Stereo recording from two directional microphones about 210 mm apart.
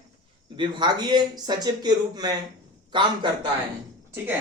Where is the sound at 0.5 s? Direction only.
20° right (ahead or behind).